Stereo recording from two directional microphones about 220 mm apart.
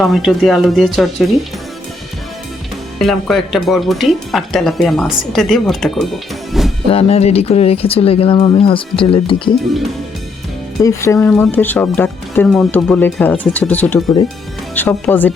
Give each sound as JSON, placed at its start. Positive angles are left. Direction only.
{"t": 0.0, "sound": "speech", "side_deg": 0}
{"t": 3.0, "sound": "speech", "side_deg": 0}
{"t": 6.5, "sound": "music", "side_deg": 0}
{"t": 6.9, "sound": "speech", "side_deg": 30}
{"t": 10.8, "sound": "speech", "side_deg": 10}